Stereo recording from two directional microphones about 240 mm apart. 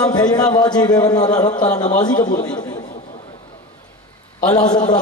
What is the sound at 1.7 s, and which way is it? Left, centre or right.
Speech, left.